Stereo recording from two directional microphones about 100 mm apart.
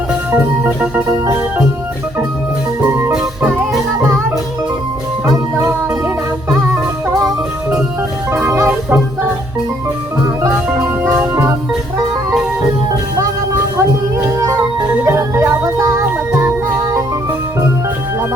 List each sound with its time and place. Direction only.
0.3 s organ: 15° right (ahead or behind)
1.2 s organ: 30° right (ahead or behind)
2.8 s music: 30° right (ahead or behind)
3.2 s music: 5° right (ahead or behind)
8.3 s music: 25° right (ahead or behind)
11.2 s music: 25° right (ahead or behind)
14.3 s organ: 30° right (ahead or behind)
14.9 s music: 25° right (ahead or behind)